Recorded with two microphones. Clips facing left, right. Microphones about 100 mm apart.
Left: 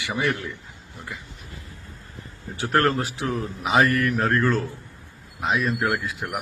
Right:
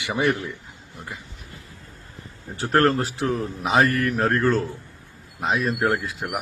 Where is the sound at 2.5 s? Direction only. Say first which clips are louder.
Right 2 dB; 35° right (ahead or behind).